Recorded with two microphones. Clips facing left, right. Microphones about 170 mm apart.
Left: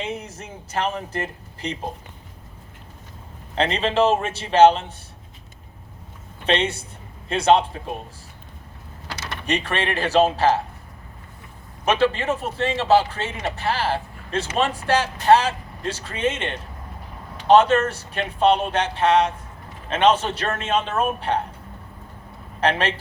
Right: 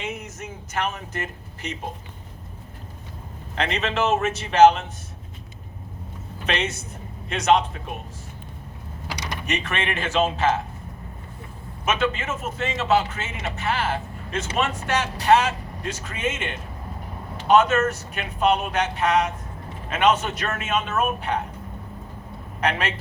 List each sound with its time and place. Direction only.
0.0 s speech: 30° left (ahead or behind)
3.5 s speech: 30° left (ahead or behind)
6.4 s speech: 30° left (ahead or behind)
9.0 s mechanisms: 15° right (ahead or behind)
9.5 s speech: 35° left (ahead or behind)
11.9 s speech: 35° left (ahead or behind)
22.6 s speech: 30° left (ahead or behind)